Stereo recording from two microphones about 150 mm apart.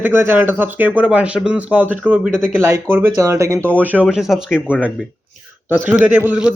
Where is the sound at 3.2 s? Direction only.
20° right (ahead or behind).